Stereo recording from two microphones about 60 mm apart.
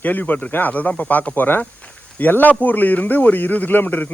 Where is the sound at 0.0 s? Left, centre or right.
Left.